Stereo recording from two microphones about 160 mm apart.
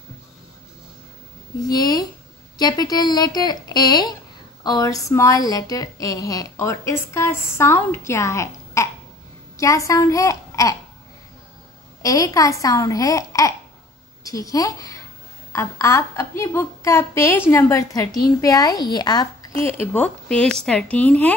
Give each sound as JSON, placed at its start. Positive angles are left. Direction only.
{"t": 1.7, "sound": "a child's voice", "side_deg": 25}
{"t": 12.0, "sound": "a woman's voice", "side_deg": 20}
{"t": 19.5, "sound": "a woman's voice", "side_deg": 15}